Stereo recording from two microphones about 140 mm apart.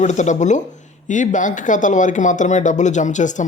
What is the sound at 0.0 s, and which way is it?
Speech, 60° left (ahead or behind).